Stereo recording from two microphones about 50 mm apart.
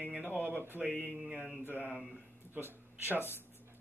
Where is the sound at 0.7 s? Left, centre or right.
Right.